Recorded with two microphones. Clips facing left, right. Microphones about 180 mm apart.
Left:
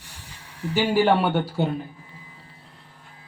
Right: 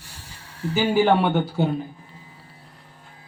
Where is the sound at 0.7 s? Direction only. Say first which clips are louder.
Right 1 dB; centre (ahead or behind).